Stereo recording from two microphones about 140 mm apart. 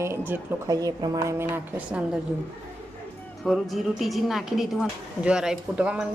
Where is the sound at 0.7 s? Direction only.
25° right (ahead or behind); by 2.2 s 5° right (ahead or behind).